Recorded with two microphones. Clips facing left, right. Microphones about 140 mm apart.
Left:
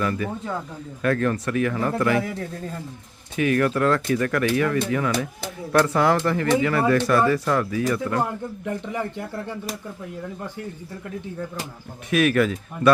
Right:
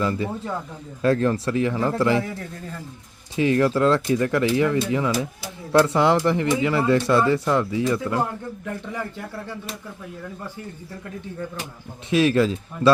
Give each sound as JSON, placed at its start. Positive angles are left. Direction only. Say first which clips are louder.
{"t": 0.0, "sound": "speech", "louder": "right 1 dB", "side_deg": -25}
{"t": 3.3, "sound": "speech", "louder": "right 2 dB", "side_deg": -25}
{"t": 8.6, "sound": "speech", "louder": "left 3 dB", "side_deg": 15}
{"t": 12.1, "sound": "speech", "louder": "right 1 dB", "side_deg": -25}